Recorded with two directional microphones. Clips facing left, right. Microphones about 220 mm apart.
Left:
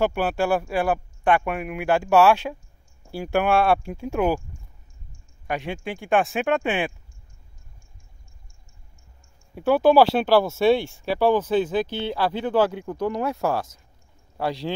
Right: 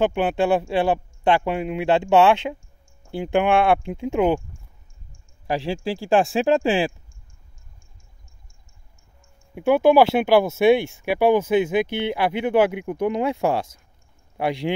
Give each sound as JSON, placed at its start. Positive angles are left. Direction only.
{"t": 0.0, "sound": "speech", "side_deg": -20}
{"t": 5.5, "sound": "speech", "side_deg": -30}
{"t": 9.7, "sound": "speech", "side_deg": -15}